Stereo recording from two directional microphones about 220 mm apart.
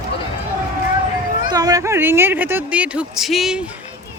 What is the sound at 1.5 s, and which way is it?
A woman's voice, 15° right (ahead or behind).